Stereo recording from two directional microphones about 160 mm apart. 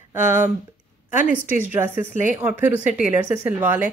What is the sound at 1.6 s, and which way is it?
Speech, 15° right (ahead or behind).